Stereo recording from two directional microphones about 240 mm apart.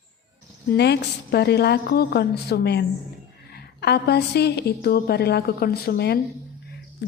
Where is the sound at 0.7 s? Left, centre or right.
Left.